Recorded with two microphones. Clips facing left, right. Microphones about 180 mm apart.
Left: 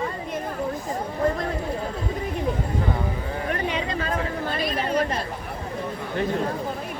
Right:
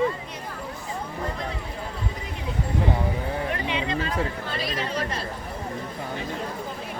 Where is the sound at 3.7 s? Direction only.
45° left (ahead or behind).